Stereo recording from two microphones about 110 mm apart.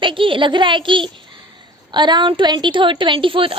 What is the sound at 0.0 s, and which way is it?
A woman's voice, 50° right (ahead or behind).